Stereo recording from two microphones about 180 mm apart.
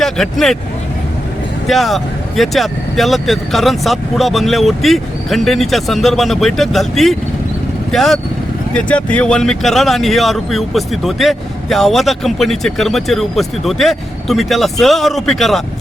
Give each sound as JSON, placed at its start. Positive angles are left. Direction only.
{"t": 0.0, "sound": "speech", "side_deg": 0}
{"t": 1.6, "sound": "speech", "side_deg": 0}